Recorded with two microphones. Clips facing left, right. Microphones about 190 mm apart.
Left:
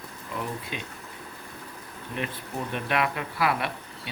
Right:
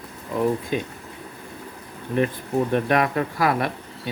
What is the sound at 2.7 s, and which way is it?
Speech, 45° right (ahead or behind).